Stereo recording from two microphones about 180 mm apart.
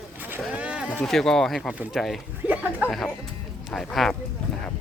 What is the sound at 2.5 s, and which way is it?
Speech, 10° right (ahead or behind).